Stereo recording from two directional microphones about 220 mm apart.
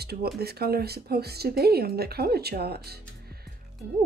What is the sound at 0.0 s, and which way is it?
Speech, 45° right (ahead or behind).